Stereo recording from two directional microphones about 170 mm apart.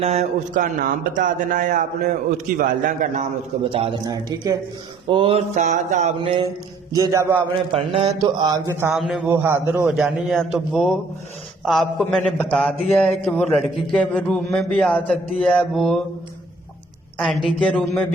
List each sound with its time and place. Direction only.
0.0 s speech: 40° right (ahead or behind)
3.6 s mantra: 35° right (ahead or behind)
4.0 s speech: 20° right (ahead or behind)
5.0 s mantra: 30° right (ahead or behind)
5.5 s speech: 45° right (ahead or behind)
6.1 s mantra: 30° right (ahead or behind)
6.9 s a man's voice: 20° right (ahead or behind)
7.5 s mantra: 35° right (ahead or behind)
8.2 s speech: 25° right (ahead or behind)
8.9 s a man's voice: centre (ahead or behind)
9.2 s a man's voice: 15° right (ahead or behind)
17.6 s speech: 5° left (ahead or behind)